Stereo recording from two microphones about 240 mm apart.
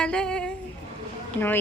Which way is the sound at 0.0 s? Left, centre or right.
Centre.